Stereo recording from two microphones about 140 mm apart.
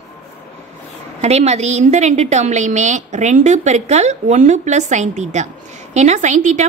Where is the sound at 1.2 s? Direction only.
50° right (ahead or behind).